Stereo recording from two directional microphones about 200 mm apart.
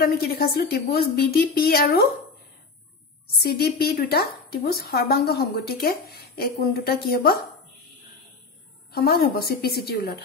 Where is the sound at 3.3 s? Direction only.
50° left (ahead or behind).